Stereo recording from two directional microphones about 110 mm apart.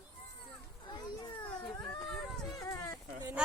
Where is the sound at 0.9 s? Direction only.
45° left (ahead or behind).